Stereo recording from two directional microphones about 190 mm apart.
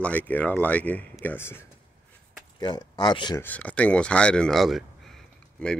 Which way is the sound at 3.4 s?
5° left (ahead or behind).